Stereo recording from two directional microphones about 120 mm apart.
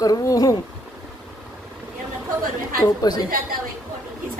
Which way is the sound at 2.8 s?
35° left (ahead or behind).